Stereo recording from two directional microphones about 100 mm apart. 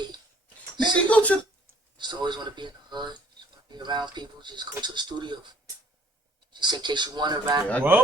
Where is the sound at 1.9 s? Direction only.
50° right (ahead or behind).